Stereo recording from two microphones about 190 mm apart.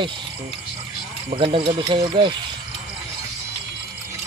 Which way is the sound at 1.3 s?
25° right (ahead or behind).